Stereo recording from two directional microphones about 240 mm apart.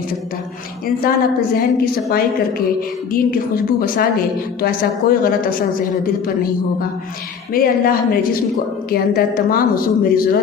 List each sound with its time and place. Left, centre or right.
1.1 s a woman's voice: left
7.5 s a woman's voice: left